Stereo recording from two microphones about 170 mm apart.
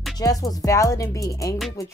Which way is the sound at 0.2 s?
20° left (ahead or behind).